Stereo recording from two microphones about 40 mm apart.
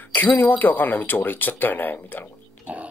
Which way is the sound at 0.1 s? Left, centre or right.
Left.